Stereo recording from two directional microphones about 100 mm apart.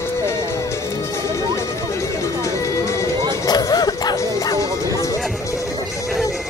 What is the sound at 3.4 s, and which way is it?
Music, 40° left (ahead or behind).